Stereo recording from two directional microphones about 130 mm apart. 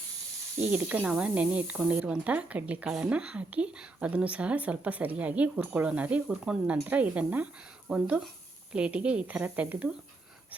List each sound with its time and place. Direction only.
0.6 s speech: 10° right (ahead or behind)